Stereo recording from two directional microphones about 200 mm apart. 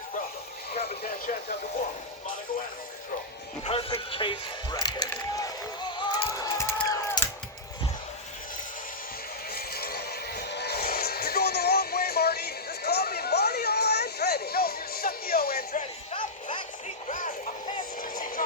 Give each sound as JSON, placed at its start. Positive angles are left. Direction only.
{"t": 1.0, "sound": "speech", "side_deg": 50}
{"t": 3.6, "sound": "speech", "side_deg": 30}
{"t": 6.0, "sound": "a sound", "side_deg": 20}
{"t": 9.5, "sound": "music", "side_deg": 50}
{"t": 17.1, "sound": "music", "side_deg": 40}
{"t": 18.0, "sound": "a sound", "side_deg": 45}